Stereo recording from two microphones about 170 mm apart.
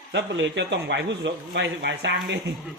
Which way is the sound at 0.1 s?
90° right.